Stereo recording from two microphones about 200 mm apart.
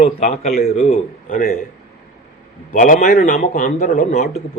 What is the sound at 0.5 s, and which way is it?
A man's voice, 45° left (ahead or behind).